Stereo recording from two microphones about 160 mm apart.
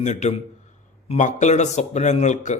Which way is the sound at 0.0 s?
50° left (ahead or behind).